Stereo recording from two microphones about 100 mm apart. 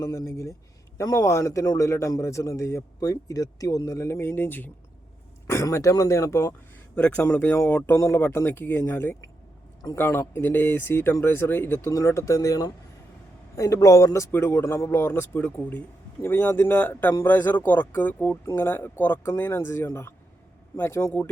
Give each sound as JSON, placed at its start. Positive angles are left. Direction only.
{"t": 0.0, "sound": "a man's voice", "side_deg": 30}
{"t": 6.9, "sound": "a man's voice", "side_deg": 15}